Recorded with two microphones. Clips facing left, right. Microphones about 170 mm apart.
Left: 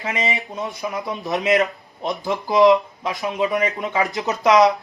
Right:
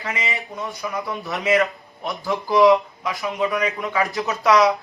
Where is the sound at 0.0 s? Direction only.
20° left (ahead or behind).